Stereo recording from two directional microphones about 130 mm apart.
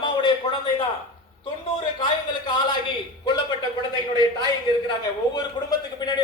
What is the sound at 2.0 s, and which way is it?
Speech, 35° left (ahead or behind).